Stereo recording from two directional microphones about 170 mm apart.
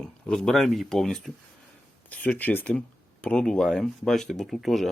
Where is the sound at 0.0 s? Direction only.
5° left (ahead or behind).